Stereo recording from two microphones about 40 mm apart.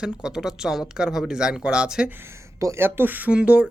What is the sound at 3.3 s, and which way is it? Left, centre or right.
Speech, right.